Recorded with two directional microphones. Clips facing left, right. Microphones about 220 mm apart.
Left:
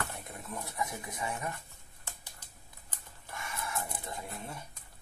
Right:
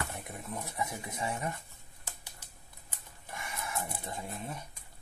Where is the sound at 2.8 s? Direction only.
15° right (ahead or behind).